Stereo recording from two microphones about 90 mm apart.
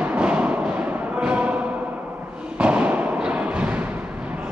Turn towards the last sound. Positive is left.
turn(degrees=-15)  # may be behind; listen again after turning